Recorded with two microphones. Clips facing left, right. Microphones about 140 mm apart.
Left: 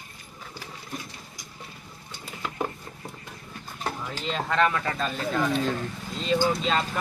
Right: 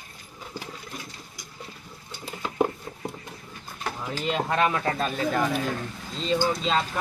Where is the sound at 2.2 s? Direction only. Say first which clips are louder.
Right 6 dB; 25° right (ahead or behind).